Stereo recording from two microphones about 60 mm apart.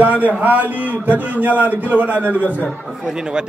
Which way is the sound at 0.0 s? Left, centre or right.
Right.